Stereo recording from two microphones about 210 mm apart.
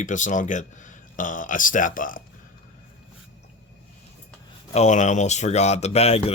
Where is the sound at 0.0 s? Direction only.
35° left (ahead or behind).